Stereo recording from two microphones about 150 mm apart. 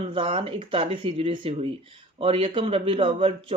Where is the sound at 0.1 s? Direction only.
35° right (ahead or behind).